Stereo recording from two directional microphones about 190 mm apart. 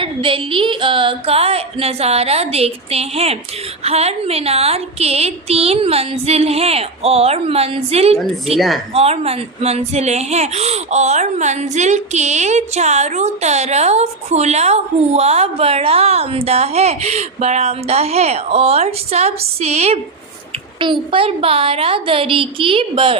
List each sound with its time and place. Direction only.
0.0 s speech: 30° right (ahead or behind)
8.5 s a woman's voice: centre (ahead or behind)
8.9 s a woman's voice: 30° right (ahead or behind)